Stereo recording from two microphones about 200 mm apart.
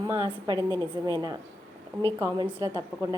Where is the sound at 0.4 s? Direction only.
20° right (ahead or behind).